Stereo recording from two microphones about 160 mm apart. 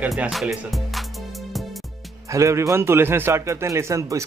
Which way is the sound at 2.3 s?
20° right (ahead or behind).